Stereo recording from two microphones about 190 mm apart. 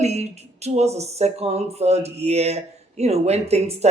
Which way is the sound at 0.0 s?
35° right (ahead or behind).